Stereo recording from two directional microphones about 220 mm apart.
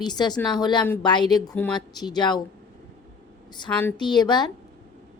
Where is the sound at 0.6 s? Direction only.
20° left (ahead or behind).